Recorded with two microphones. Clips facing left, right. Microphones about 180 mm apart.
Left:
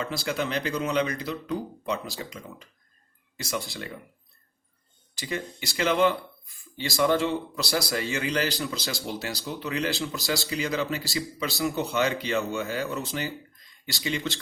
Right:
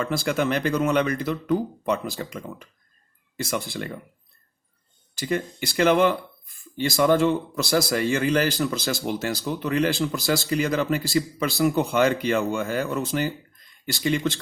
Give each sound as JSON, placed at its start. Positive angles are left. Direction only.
{"t": 0.0, "sound": "speech", "side_deg": -50}
{"t": 5.2, "sound": "speech", "side_deg": -50}